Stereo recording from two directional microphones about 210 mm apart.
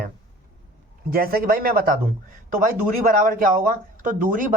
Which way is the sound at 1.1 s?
45° right (ahead or behind).